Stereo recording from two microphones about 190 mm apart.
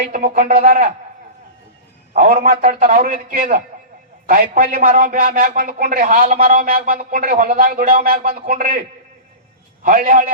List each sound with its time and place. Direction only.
0.1 s a man's voice: 45° right (ahead or behind)
2.1 s a man's voice: 50° right (ahead or behind)
9.8 s a man's voice: 45° right (ahead or behind)